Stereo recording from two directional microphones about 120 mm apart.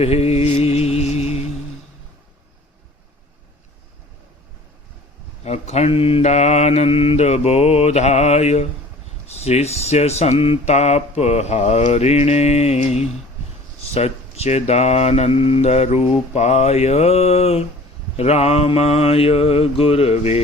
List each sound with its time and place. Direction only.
0.0 s mantra: 60° left (ahead or behind)
5.5 s speech: 65° left (ahead or behind)